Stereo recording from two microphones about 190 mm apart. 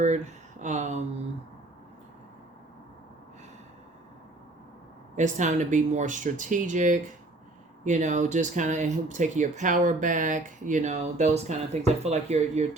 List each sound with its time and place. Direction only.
0.6 s speech: 40° right (ahead or behind)
5.1 s speech: 40° right (ahead or behind)